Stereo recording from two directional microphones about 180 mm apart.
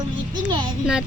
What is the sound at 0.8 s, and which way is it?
Speech, 5° right (ahead or behind).